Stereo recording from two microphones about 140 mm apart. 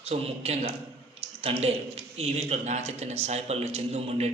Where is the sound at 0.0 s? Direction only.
45° right (ahead or behind).